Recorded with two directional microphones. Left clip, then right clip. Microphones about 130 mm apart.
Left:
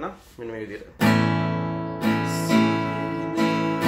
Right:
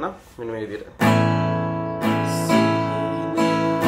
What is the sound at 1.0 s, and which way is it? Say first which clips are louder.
Music: right 3 dB; 25° left (ahead or behind).